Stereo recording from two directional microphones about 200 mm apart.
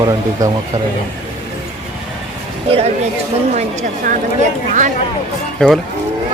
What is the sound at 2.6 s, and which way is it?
Speech, 30° right (ahead or behind).